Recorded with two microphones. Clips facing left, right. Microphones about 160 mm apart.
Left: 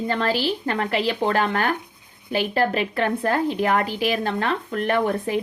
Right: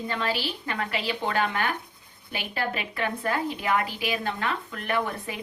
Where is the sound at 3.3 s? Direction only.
50° left (ahead or behind).